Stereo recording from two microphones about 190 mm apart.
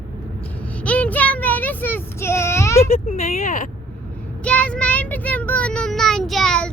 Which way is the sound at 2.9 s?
35° left (ahead or behind).